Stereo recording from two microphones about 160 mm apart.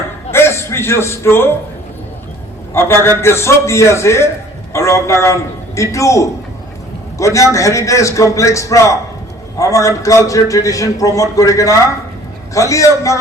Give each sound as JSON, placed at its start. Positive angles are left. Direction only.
{"t": 0.3, "sound": "chuckle", "side_deg": 15}
{"t": 2.7, "sound": "a man's voice", "side_deg": 15}